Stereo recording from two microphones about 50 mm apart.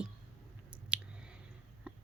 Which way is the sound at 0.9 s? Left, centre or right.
Right.